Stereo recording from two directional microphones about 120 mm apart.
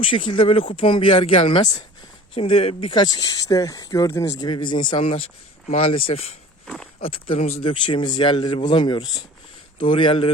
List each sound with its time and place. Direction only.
0.0 s speech: 45° left (ahead or behind)
2.3 s speech: 55° left (ahead or behind); by 4.4 s 25° left (ahead or behind)
4.4 s speech: 40° left (ahead or behind); by 7.7 s 60° left (ahead or behind)
7.7 s speech: 40° left (ahead or behind)